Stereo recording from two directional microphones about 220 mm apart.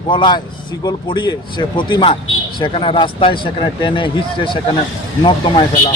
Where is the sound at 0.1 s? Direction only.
20° left (ahead or behind).